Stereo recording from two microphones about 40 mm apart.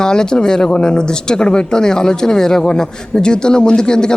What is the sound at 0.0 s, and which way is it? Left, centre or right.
A man's voice, centre.